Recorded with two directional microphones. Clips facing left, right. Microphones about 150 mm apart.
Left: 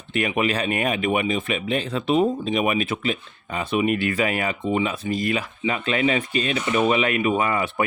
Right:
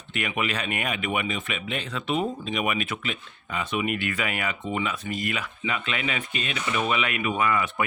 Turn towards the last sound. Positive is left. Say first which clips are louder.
# left 3 dB
turn(degrees=30)  # may be behind; listen again after turning